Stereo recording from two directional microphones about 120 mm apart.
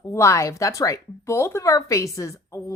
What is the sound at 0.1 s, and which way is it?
Speech, 25° left (ahead or behind).